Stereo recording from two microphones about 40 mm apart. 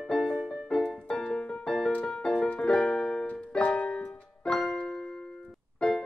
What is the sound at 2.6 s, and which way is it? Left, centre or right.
Keyboard, left.